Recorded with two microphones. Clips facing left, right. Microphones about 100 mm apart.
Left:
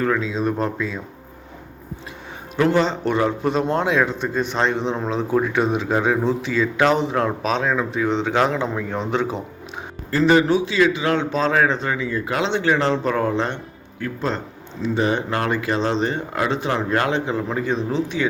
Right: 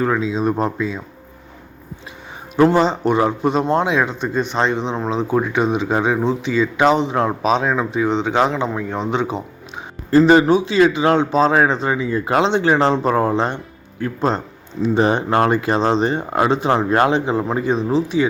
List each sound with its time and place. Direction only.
0.0 s speech: 15° right (ahead or behind)
2.6 s speech: 35° right (ahead or behind)
2.8 s speech: 10° right (ahead or behind)
3.6 s speech: 20° right (ahead or behind)
3.8 s speech: 5° right (ahead or behind)
6.7 s speech: 15° right (ahead or behind)
7.1 s speech: 5° right (ahead or behind)
10.1 s speech: 30° right (ahead or behind)